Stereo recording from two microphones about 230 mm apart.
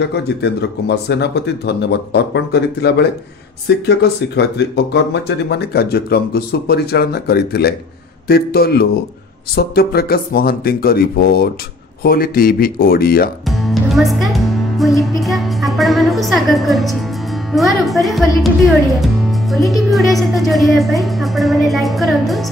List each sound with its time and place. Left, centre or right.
0.1 s speech: left
13.5 s speech: centre
19.5 s speech: centre